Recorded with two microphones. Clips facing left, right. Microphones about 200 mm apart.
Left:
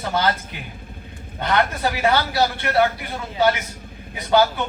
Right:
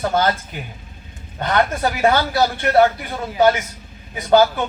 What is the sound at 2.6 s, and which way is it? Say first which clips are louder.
Speech: right 6 dB; 50° right (ahead or behind).